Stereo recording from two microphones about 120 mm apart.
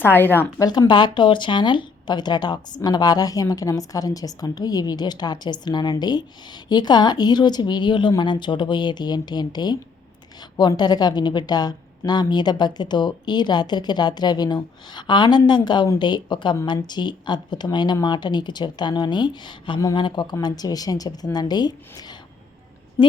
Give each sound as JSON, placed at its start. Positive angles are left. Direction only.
{"t": 0.0, "sound": "speech", "side_deg": 15}
{"t": 0.6, "sound": "speech", "side_deg": 35}